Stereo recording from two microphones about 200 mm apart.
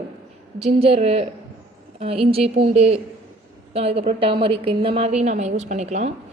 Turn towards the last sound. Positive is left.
turn(degrees=-35)  # may be behind; listen again after turning